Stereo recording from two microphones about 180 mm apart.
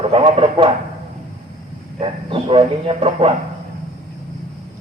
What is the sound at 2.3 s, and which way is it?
A man's voice, 30° right (ahead or behind).